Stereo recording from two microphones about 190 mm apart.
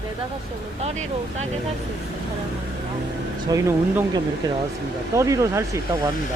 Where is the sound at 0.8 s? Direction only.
35° right (ahead or behind).